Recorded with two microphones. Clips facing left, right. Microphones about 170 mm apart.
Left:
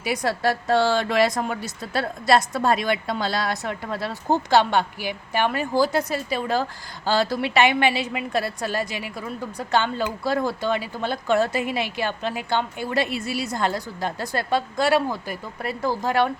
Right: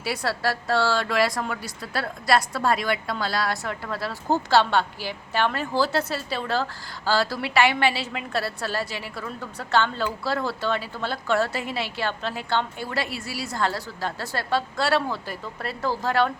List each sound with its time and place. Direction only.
0.0 s speech: 15° left (ahead or behind)